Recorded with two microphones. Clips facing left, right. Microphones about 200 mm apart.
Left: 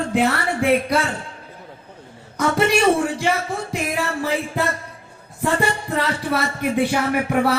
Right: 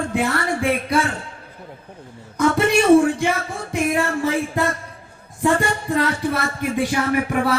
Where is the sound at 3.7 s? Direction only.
60° right (ahead or behind).